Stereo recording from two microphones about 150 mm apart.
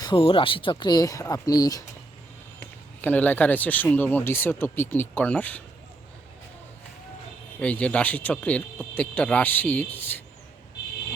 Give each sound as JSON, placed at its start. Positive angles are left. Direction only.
{"t": 0.0, "sound": "speech", "side_deg": 35}
{"t": 2.6, "sound": "speech", "side_deg": 10}
{"t": 7.6, "sound": "speech", "side_deg": 10}